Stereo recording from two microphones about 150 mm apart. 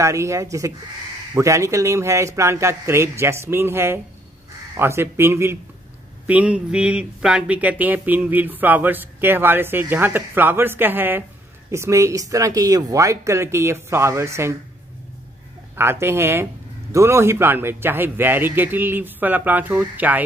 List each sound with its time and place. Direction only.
0.0 s speech: 20° right (ahead or behind)
15.7 s speech: 15° right (ahead or behind)